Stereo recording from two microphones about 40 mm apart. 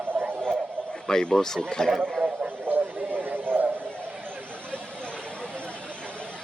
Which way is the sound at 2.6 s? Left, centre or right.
Right.